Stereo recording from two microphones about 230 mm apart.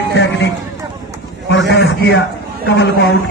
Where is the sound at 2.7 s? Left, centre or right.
Left.